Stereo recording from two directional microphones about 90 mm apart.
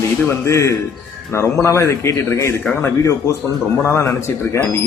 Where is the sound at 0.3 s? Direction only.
35° left (ahead or behind).